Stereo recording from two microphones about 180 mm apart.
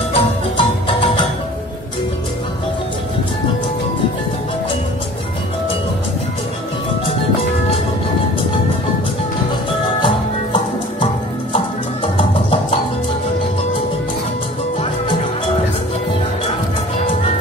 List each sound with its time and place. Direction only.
0.1 s music: 30° left (ahead or behind)
10.0 s music: 25° left (ahead or behind)